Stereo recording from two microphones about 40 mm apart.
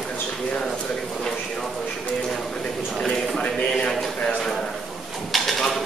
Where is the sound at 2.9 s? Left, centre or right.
Centre.